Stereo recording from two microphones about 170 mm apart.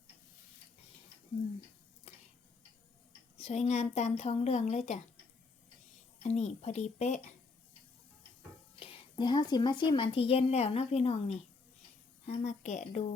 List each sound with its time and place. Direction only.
2.1 s tick-tock: 35° left (ahead or behind)
3.3 s a woman's voice: 40° left (ahead or behind)
6.2 s a woman's voice: 40° left (ahead or behind)
8.8 s a woman's voice: 30° left (ahead or behind)